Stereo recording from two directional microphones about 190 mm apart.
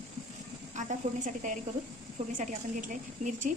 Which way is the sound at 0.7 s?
40° right (ahead or behind).